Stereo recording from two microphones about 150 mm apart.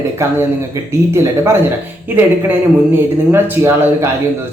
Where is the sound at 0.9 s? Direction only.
15° right (ahead or behind).